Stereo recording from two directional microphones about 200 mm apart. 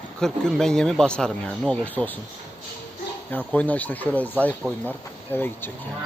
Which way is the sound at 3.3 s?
10° left (ahead or behind).